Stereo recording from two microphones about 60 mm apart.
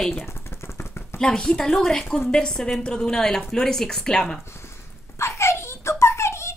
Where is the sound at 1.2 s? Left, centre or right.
Centre.